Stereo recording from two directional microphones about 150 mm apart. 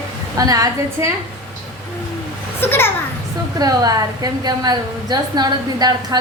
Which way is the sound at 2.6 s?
15° left (ahead or behind).